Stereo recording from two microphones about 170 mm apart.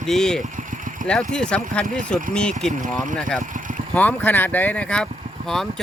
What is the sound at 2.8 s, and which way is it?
Speech, 50° right (ahead or behind).